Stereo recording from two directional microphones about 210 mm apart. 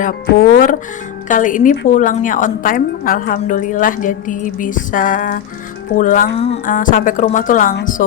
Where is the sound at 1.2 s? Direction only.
40° left (ahead or behind).